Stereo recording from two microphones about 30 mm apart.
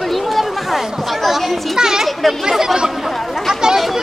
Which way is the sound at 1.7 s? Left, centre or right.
Right.